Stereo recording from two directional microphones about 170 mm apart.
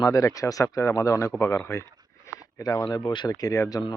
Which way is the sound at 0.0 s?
20° left (ahead or behind).